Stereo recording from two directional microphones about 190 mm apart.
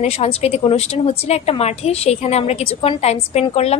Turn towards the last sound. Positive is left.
turn(degrees=35)  # may be behind; listen again after turning